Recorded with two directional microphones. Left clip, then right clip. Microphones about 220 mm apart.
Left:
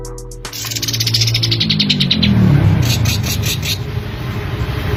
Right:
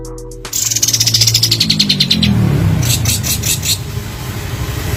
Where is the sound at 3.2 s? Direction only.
10° left (ahead or behind).